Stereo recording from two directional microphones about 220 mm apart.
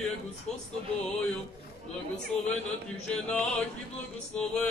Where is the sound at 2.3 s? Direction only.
30° left (ahead or behind).